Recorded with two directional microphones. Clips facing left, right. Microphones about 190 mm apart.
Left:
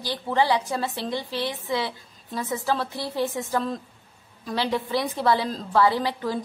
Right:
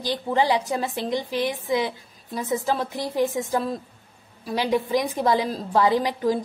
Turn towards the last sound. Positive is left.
turn(degrees=-15)  # may be behind; listen again after turning